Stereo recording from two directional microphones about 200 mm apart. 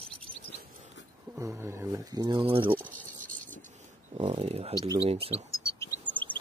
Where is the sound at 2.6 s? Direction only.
10° right (ahead or behind).